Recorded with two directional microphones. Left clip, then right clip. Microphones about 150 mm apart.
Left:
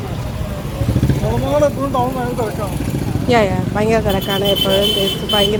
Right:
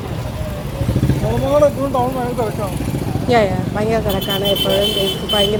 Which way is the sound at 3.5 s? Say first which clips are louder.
Left 2 dB; 20° left (ahead or behind).